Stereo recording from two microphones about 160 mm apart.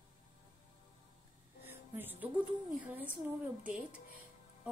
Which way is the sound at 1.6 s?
10° right (ahead or behind).